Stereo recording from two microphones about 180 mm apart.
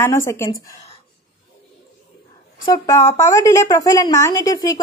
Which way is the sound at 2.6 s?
20° left (ahead or behind).